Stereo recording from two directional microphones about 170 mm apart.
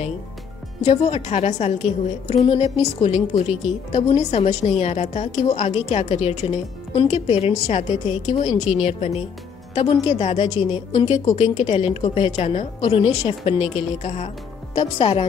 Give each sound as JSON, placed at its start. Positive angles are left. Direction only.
{"t": 0.8, "sound": "a woman's voice", "side_deg": 40}